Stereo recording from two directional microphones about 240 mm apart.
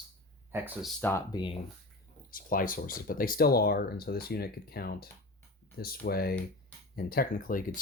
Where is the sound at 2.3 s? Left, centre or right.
Left.